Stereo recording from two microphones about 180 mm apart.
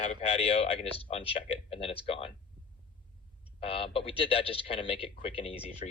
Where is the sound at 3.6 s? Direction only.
30° left (ahead or behind).